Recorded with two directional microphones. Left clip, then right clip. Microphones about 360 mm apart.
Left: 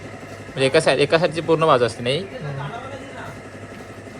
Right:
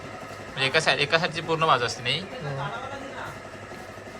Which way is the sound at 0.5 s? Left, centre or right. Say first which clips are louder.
Left 6 dB; centre.